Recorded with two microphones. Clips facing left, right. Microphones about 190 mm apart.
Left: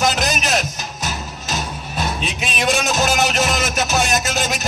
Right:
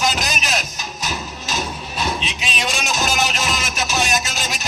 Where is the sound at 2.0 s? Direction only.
55° left (ahead or behind).